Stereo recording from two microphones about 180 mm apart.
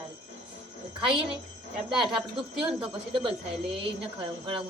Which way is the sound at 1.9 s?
Centre (ahead or behind).